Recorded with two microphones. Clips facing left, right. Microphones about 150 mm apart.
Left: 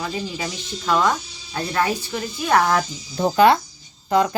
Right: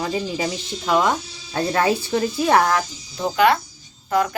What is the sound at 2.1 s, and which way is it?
Speech, 30° right (ahead or behind).